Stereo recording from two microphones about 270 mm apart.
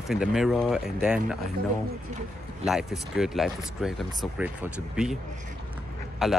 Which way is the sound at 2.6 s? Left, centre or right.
Centre.